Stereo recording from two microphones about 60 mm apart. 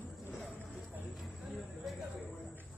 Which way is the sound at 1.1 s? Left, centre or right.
Centre.